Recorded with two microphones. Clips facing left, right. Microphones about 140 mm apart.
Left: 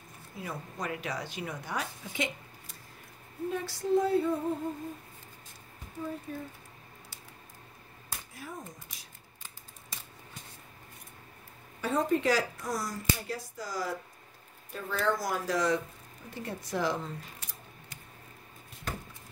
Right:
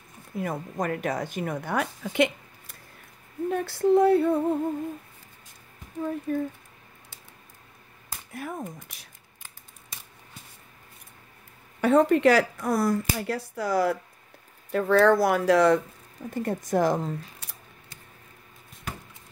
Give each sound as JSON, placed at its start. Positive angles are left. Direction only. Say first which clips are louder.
{"t": 0.4, "sound": "speech", "louder": "right 9 dB", "side_deg": -50}
{"t": 6.3, "sound": "speech", "louder": "right 12 dB", "side_deg": -55}
{"t": 8.3, "sound": "speech", "louder": "right 11 dB", "side_deg": -60}
{"t": 11.8, "sound": "speech", "louder": "right 9 dB", "side_deg": -65}
{"t": 14.7, "sound": "speech", "louder": "right 12 dB", "side_deg": -75}
{"t": 16.3, "sound": "speech", "louder": "right 9 dB", "side_deg": -50}